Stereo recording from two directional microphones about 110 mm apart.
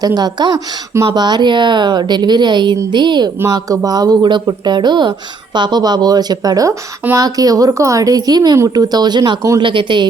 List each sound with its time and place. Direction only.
0.0 s a woman's voice: 35° right (ahead or behind)